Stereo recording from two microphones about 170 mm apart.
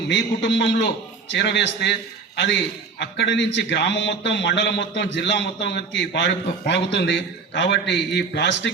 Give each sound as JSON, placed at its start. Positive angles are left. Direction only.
{"t": 0.1, "sound": "a man's voice", "side_deg": 90}